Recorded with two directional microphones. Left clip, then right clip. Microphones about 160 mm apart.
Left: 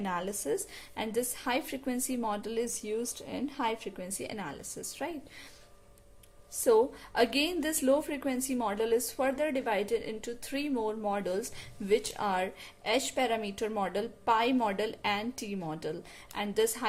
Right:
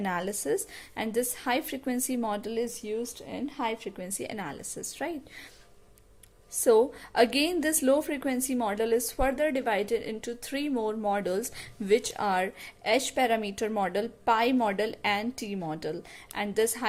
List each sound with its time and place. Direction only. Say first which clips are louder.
0.0 s a woman's voice: right 3 dB; 30° right (ahead or behind)
6.6 s a woman's voice: right 3 dB; 25° right (ahead or behind)